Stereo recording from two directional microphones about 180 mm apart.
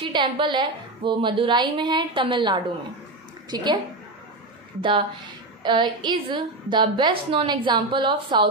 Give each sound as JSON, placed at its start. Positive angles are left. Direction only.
{"t": 0.0, "sound": "a woman's voice", "side_deg": -25}
{"t": 5.6, "sound": "a woman's voice", "side_deg": -25}